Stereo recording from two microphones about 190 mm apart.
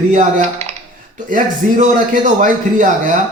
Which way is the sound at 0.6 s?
35° right (ahead or behind).